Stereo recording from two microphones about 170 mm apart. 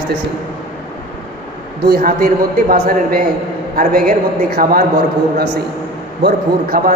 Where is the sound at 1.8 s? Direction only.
60° right (ahead or behind).